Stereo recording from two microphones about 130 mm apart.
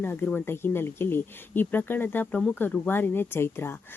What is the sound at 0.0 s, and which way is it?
A woman's voice, 15° left (ahead or behind).